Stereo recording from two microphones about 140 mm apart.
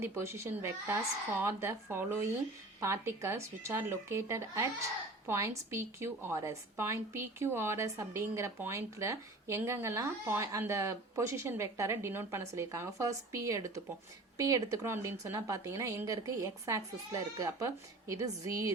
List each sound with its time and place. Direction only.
0.0 s a woman's voice: 20° right (ahead or behind)